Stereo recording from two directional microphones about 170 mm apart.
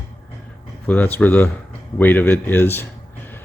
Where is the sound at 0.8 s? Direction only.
10° left (ahead or behind).